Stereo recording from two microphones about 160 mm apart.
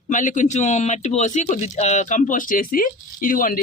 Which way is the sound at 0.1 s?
50° left (ahead or behind).